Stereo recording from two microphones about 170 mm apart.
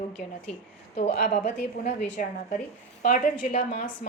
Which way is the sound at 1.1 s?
65° left (ahead or behind).